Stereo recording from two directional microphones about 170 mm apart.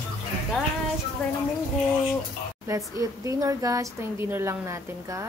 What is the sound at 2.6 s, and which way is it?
Speech, 20° right (ahead or behind).